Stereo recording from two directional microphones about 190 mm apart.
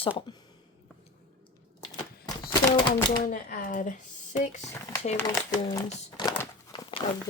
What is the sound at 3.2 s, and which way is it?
Speech, 45° left (ahead or behind).